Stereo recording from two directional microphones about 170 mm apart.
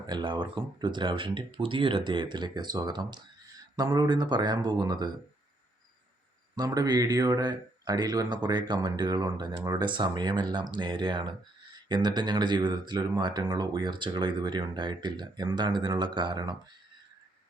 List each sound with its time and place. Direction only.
0.1 s speech: 25° right (ahead or behind)
6.6 s speech: 25° right (ahead or behind)